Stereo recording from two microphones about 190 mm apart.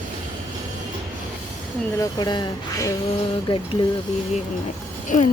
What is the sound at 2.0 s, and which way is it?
Speech, 20° left (ahead or behind).